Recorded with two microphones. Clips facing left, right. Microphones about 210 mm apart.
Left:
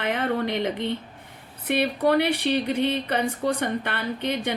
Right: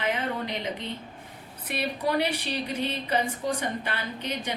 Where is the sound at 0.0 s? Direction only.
55° left (ahead or behind).